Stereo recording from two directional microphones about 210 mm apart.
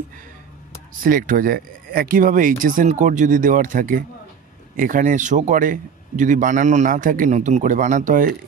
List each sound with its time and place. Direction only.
1.0 s a man's voice: 40° right (ahead or behind)